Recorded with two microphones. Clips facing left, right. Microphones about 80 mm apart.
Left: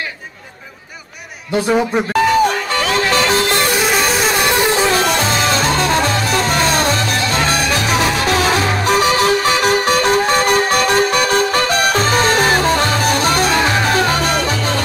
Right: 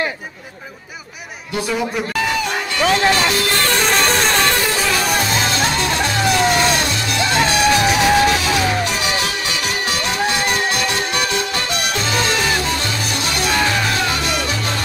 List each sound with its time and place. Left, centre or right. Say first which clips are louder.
1.7 s music: left 6 dB; left
3.1 s music: left 2 dB; left
3.7 s music: left 1 dB; centre; by 4.9 s left
8.4 s music: left 3 dB; left